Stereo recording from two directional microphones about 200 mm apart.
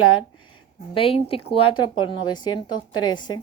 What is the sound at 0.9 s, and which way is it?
A woman's voice, 30° left (ahead or behind).